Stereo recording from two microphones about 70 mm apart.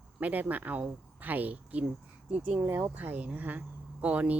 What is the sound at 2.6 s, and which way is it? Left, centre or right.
Speech, right.